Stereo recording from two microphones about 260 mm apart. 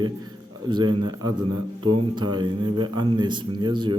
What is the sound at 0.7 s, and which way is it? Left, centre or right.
A man's voice, centre.